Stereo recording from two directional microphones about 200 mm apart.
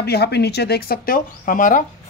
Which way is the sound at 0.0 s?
55° left (ahead or behind).